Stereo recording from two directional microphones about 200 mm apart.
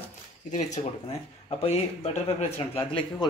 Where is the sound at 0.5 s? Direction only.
35° left (ahead or behind).